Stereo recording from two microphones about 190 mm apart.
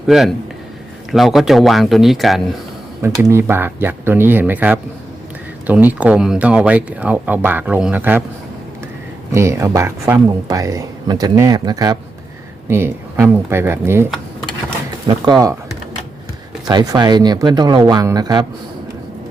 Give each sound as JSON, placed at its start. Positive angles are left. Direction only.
{"t": 0.1, "sound": "speech", "side_deg": 0}
{"t": 3.0, "sound": "speech", "side_deg": -15}
{"t": 9.3, "sound": "speech", "side_deg": -15}
{"t": 16.6, "sound": "speech", "side_deg": -20}